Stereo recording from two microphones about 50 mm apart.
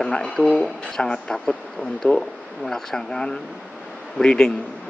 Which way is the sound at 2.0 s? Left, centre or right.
Left.